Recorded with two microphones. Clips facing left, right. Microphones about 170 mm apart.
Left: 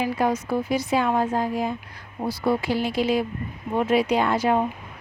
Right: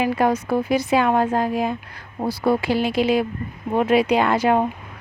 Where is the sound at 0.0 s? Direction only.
65° right (ahead or behind).